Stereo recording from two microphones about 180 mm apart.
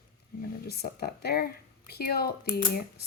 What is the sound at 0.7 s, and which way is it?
Speech, 60° left (ahead or behind).